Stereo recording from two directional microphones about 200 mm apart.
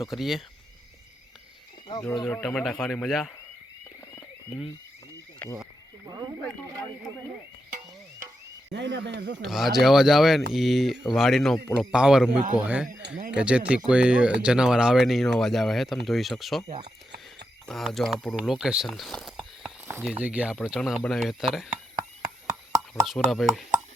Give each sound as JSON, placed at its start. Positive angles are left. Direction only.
{"t": 0.0, "sound": "speech", "side_deg": 0}
{"t": 2.0, "sound": "speech", "side_deg": 5}
{"t": 4.1, "sound": "a sound", "side_deg": 10}
{"t": 5.4, "sound": "speech", "side_deg": 5}
{"t": 8.7, "sound": "speech", "side_deg": -60}
{"t": 9.5, "sound": "speech", "side_deg": 0}
{"t": 12.9, "sound": "speech", "side_deg": -60}
{"t": 13.3, "sound": "speech", "side_deg": -5}
{"t": 17.7, "sound": "speech", "side_deg": 0}
{"t": 23.0, "sound": "speech", "side_deg": 0}